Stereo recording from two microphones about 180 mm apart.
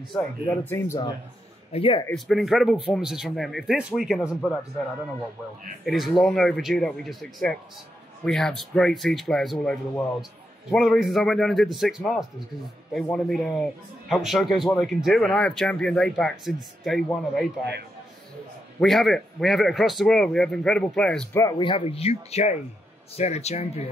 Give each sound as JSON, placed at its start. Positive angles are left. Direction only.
{"t": 0.5, "sound": "speech", "side_deg": 10}
{"t": 1.7, "sound": "speech", "side_deg": 30}
{"t": 2.1, "sound": "speech", "side_deg": 0}
{"t": 5.9, "sound": "speech", "side_deg": 0}
{"t": 18.8, "sound": "speech", "side_deg": 0}
{"t": 21.4, "sound": "speech", "side_deg": 20}